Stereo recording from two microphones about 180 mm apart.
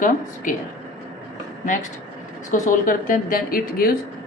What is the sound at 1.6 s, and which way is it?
A woman's voice, 45° left (ahead or behind).